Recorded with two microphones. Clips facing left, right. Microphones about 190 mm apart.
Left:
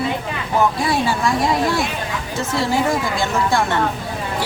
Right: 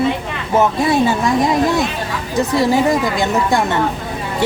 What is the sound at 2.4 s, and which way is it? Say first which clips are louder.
Speech: right 7 dB; 15° right (ahead or behind).